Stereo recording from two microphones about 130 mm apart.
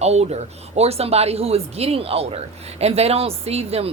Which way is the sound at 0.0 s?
55° right (ahead or behind).